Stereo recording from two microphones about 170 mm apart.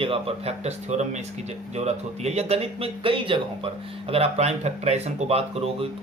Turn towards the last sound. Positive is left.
turn(degrees=-35)  # may be behind; listen again after turning